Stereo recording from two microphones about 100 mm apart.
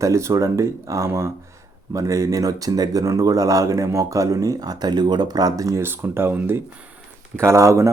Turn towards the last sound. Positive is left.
turn(degrees=-30)  # may be behind; listen again after turning